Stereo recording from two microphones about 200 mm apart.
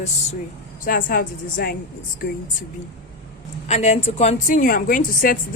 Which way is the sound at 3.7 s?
35° left (ahead or behind).